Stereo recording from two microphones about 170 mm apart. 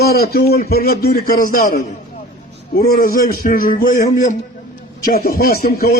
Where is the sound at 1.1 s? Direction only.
55° left (ahead or behind).